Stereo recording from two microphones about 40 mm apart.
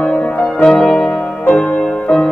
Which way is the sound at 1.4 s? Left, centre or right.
Left.